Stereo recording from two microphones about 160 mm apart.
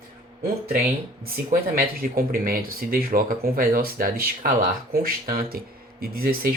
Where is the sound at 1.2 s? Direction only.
60° right (ahead or behind).